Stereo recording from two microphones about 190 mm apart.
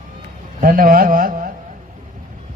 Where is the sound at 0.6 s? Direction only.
45° right (ahead or behind).